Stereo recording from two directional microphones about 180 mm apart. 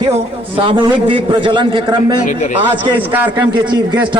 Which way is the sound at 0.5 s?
30° right (ahead or behind).